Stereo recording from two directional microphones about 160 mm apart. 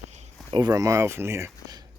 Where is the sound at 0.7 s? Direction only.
20° right (ahead or behind).